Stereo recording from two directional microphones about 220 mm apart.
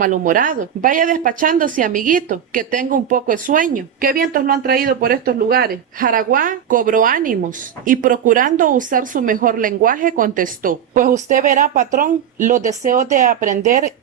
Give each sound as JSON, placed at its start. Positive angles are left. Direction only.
{"t": 0.0, "sound": "speech", "side_deg": -35}